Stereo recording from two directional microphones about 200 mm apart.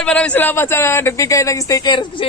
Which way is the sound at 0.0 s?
5° left (ahead or behind).